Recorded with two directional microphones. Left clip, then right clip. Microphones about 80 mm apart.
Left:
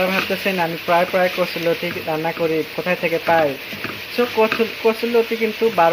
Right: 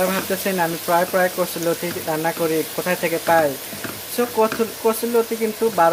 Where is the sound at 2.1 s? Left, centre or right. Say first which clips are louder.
Even; right.